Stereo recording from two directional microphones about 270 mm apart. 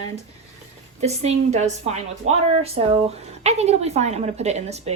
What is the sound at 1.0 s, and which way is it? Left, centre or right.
A woman's voice, right.